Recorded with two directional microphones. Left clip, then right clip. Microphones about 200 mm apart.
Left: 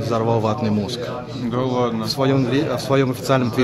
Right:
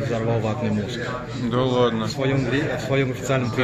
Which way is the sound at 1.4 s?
Centre (ahead or behind).